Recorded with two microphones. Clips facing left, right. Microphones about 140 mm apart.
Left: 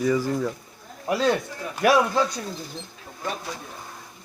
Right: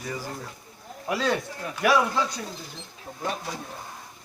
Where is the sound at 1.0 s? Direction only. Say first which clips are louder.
Left 4 dB; 35° left (ahead or behind).